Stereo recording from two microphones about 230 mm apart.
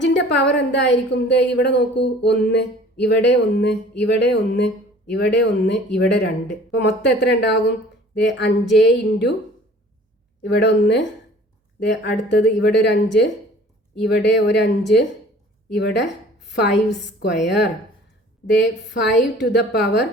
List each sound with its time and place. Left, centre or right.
0.0 s a woman's voice: left
10.4 s a woman's voice: left
18.5 s a woman's voice: left